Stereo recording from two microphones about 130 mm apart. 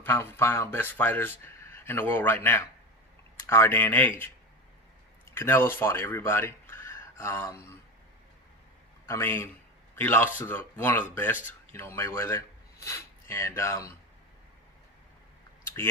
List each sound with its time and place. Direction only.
0.0 s speech: 20° left (ahead or behind)
5.3 s speech: 20° left (ahead or behind)
9.0 s speech: 20° left (ahead or behind)